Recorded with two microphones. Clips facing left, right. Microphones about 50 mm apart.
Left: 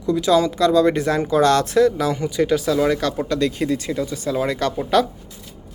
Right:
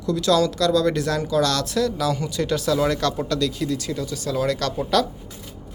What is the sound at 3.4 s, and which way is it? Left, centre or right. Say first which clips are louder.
Speech: left 3 dB; left.